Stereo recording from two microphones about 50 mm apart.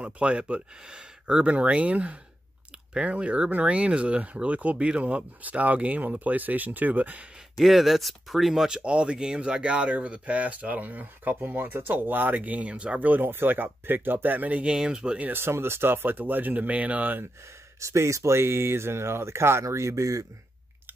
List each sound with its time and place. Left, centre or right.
0.0 s speech: right
7.5 s speech: centre
8.6 s speech: centre
15.3 s speech: right
17.7 s speech: right